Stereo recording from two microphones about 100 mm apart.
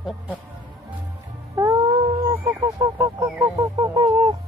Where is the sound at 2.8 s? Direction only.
45° right (ahead or behind).